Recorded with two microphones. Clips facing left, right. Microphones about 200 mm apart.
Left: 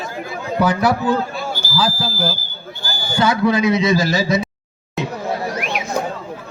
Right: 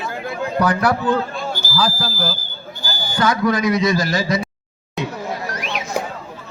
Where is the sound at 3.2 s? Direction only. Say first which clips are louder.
Left 2 dB; 5° left (ahead or behind).